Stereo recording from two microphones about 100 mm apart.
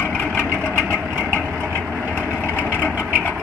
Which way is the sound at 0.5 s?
25° right (ahead or behind).